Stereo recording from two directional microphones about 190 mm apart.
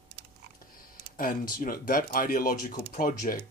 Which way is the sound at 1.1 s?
45° left (ahead or behind).